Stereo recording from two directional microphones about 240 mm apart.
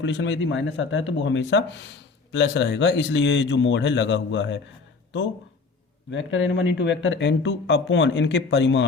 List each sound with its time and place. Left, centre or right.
0.0 s speech: left
6.1 s speech: left